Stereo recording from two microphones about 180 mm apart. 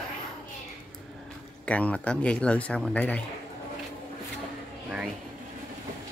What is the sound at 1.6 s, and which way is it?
Speech, 5° left (ahead or behind).